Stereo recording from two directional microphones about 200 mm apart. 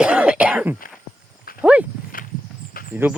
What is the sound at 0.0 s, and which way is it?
Throat clearing, 5° right (ahead or behind).